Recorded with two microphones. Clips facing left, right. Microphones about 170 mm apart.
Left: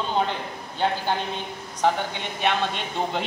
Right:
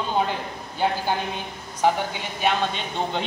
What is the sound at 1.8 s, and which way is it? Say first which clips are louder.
Speech: right 1 dB; 5° right (ahead or behind).